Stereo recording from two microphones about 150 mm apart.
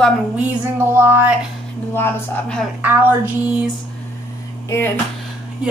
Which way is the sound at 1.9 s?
15° left (ahead or behind).